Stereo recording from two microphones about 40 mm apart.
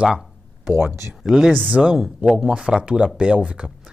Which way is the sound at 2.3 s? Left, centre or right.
Centre.